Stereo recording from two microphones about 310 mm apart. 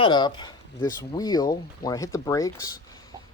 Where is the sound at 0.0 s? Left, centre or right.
Centre.